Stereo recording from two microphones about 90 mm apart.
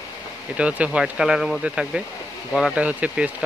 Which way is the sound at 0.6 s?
15° right (ahead or behind).